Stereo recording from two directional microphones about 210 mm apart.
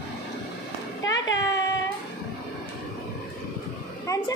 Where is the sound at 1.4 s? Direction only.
15° left (ahead or behind).